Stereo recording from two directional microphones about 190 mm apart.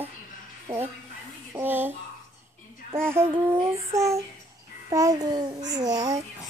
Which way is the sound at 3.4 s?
10° right (ahead or behind).